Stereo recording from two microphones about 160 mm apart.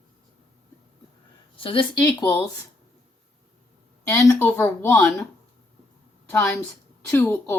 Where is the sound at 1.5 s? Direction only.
35° left (ahead or behind).